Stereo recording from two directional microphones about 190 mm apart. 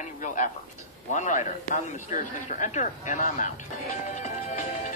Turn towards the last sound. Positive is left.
turn(degrees=40)  # may be behind; listen again after turning